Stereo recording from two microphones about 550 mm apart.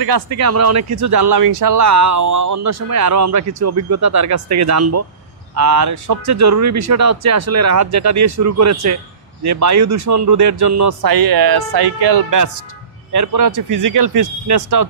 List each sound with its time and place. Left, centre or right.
0.0 s a man's voice: right